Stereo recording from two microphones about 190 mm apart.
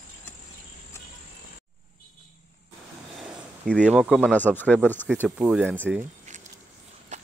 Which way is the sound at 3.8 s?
Centre (ahead or behind).